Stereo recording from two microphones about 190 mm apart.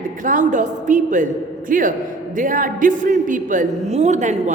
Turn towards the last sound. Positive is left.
turn(degrees=-40)  # may be behind; listen again after turning